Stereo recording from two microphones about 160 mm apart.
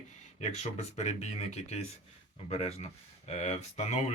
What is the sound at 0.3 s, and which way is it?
Speech, 45° left (ahead or behind).